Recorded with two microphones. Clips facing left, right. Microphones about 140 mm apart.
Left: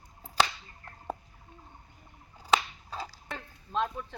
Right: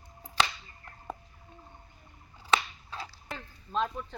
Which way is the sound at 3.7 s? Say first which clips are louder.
Even; 5° left (ahead or behind).